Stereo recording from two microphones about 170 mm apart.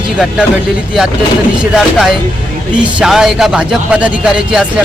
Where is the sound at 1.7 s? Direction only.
5° right (ahead or behind).